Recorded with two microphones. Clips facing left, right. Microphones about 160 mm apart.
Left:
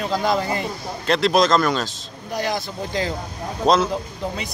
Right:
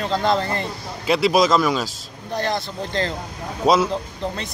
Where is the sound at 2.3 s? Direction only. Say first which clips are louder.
Right 1 dB; 10° left (ahead or behind).